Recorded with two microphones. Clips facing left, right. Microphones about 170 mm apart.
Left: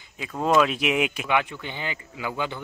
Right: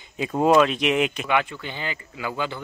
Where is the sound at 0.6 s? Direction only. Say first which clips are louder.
Right 2 dB; 5° left (ahead or behind).